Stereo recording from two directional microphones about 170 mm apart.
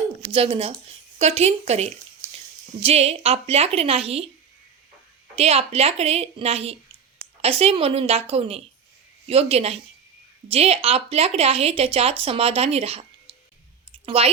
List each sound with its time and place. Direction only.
0.3 s speech: 30° right (ahead or behind)
5.4 s speech: 35° right (ahead or behind)
13.9 s clicking: 35° right (ahead or behind)